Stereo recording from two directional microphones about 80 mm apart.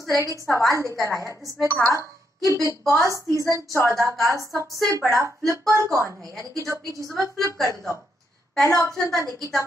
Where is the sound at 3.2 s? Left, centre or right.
Right.